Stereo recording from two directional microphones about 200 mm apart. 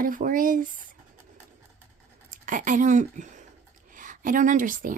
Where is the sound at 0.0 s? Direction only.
45° right (ahead or behind).